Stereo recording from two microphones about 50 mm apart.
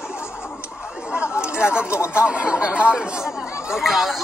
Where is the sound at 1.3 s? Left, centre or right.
Centre.